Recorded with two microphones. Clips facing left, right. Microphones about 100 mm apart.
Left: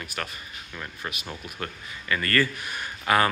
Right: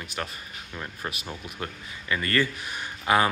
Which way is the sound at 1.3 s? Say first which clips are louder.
Even; 15° right (ahead or behind).